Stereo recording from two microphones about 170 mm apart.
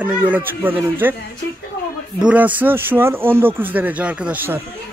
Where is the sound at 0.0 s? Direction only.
10° right (ahead or behind).